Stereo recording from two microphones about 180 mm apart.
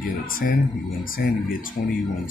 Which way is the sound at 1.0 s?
50° left (ahead or behind).